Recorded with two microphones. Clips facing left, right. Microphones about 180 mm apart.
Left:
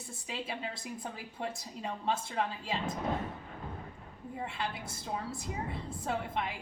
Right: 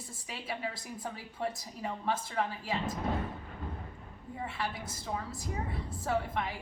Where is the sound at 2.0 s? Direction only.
25° left (ahead or behind).